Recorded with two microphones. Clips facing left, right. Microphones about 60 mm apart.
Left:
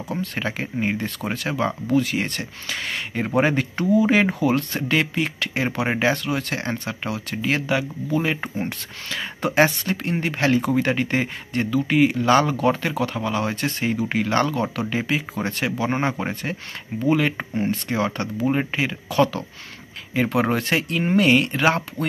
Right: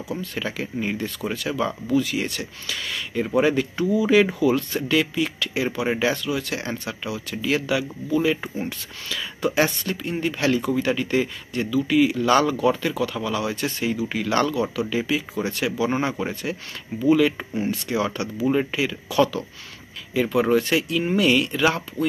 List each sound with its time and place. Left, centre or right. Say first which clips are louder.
0.1 s speech: left 3 dB; left
0.4 s speech: left 1 dB; left
12.5 s speech: even; left
14.5 s speech: even; left